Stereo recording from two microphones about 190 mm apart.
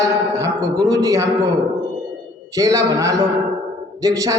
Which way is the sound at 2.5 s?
15° right (ahead or behind).